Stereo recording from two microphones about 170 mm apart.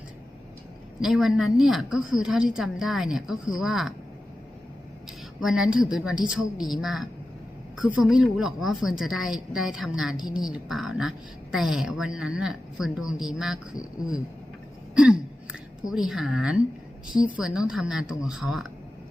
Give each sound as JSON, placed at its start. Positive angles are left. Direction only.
{"t": 1.0, "sound": "a woman's voice", "side_deg": -5}
{"t": 5.4, "sound": "a woman's voice", "side_deg": -5}
{"t": 14.9, "sound": "hiccup", "side_deg": -5}
{"t": 15.9, "sound": "a woman's voice", "side_deg": 0}